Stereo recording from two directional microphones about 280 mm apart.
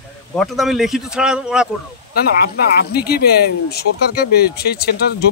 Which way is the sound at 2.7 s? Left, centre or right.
Left.